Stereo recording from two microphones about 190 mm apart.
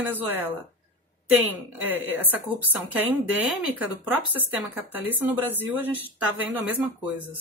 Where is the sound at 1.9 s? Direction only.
10° right (ahead or behind).